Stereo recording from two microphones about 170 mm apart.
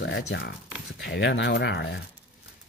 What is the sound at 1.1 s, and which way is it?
Speech, 90° left.